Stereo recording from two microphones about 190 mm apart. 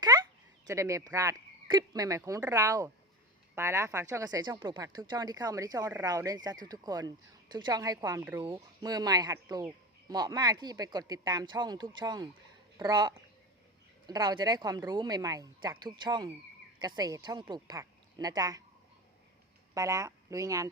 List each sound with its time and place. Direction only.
0.7 s a woman's voice: 15° right (ahead or behind)
19.7 s speech: 15° right (ahead or behind)